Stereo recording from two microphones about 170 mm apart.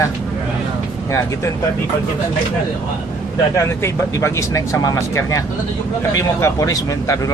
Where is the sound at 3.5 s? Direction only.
15° left (ahead or behind).